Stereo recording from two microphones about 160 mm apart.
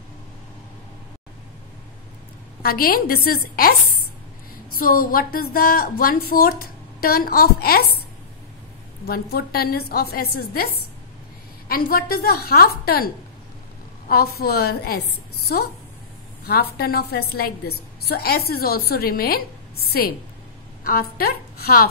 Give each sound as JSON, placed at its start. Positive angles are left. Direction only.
{"t": 2.6, "sound": "a woman's voice", "side_deg": 70}
{"t": 4.7, "sound": "a woman's voice", "side_deg": 65}
{"t": 9.0, "sound": "a woman's voice", "side_deg": 70}